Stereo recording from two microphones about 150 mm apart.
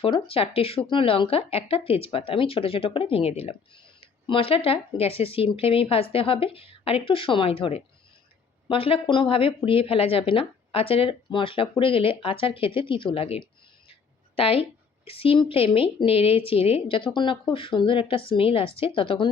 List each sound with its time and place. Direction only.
0.0 s a woman's voice: 40° left (ahead or behind)